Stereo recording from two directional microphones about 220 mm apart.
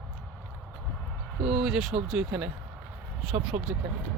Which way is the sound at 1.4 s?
Centre (ahead or behind).